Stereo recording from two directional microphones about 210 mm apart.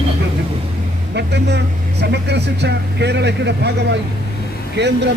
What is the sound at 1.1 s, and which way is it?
A man's voice, 55° right (ahead or behind).